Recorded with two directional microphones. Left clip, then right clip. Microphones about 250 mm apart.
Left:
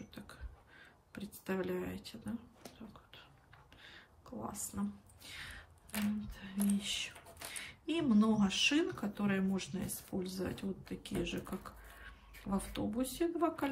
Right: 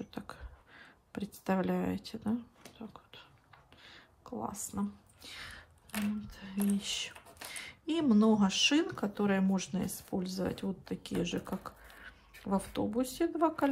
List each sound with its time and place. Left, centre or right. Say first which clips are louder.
0.1 s speech: right 7 dB; centre
2.9 s whispering: right 4 dB; centre
4.7 s speech: right 4 dB; centre
5.2 s a sound: right 2 dB; centre
6.3 s speech: right 2 dB; centre